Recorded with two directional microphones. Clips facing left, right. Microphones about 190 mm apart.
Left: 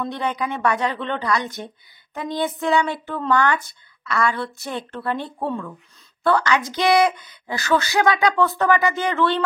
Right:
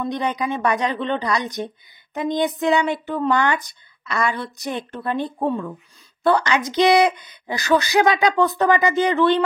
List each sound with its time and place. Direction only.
0.0 s a woman's voice: 15° right (ahead or behind)